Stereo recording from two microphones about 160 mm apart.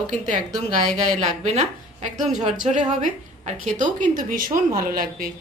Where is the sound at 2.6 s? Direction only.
50° right (ahead or behind).